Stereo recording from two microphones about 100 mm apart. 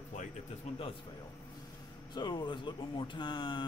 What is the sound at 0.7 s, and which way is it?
Speech, 90° left.